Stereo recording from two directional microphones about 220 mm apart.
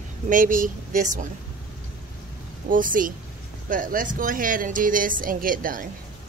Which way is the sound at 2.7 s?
40° right (ahead or behind).